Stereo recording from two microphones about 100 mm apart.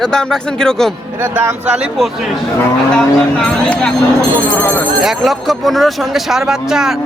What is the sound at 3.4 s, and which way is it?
Speech, 10° left (ahead or behind).